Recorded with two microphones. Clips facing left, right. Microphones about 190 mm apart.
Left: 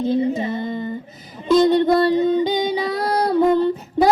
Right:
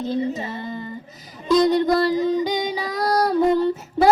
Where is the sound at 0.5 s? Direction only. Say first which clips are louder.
Left 6 dB; 20° left (ahead or behind).